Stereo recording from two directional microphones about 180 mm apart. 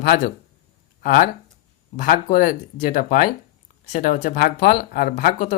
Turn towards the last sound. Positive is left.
turn(degrees=45)  # may be behind; listen again after turning